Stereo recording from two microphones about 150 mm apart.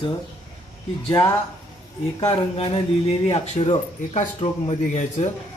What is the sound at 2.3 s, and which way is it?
Speech, 35° left (ahead or behind).